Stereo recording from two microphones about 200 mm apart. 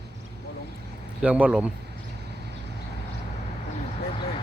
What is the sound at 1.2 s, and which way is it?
Speech, 5° right (ahead or behind).